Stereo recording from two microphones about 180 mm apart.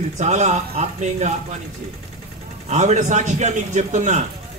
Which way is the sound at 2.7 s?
40° right (ahead or behind).